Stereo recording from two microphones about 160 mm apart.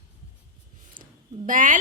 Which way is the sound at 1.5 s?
55° right (ahead or behind).